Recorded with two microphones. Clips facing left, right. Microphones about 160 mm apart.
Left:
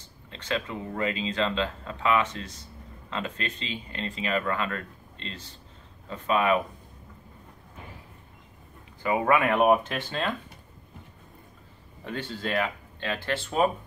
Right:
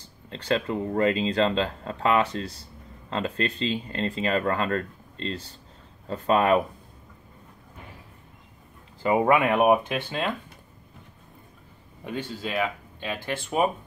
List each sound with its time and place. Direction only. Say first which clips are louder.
0.3 s speech: right 5 dB; 35° right (ahead or behind)
9.0 s speech: right 3 dB; 20° right (ahead or behind)
12.1 s speech: even; 10° right (ahead or behind)